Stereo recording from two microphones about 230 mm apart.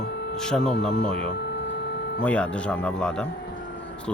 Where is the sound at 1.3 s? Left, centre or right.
Left.